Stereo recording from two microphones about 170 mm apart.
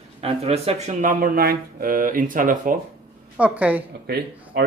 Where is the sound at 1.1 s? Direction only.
60° right (ahead or behind).